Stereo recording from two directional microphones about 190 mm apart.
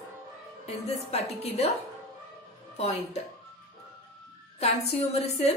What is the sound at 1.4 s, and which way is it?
Speech, 35° left (ahead or behind).